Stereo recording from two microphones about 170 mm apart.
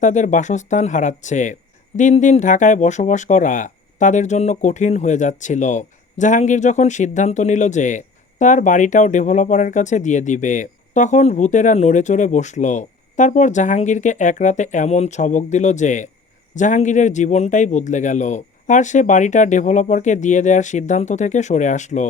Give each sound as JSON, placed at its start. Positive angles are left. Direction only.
{"t": 0.0, "sound": "speech", "side_deg": 45}